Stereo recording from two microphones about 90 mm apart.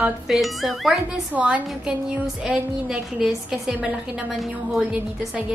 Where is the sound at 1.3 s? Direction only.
15° right (ahead or behind).